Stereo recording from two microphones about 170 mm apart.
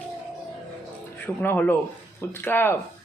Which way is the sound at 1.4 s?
10° left (ahead or behind).